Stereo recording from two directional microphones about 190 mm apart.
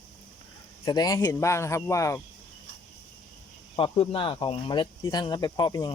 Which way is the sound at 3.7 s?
30° left (ahead or behind).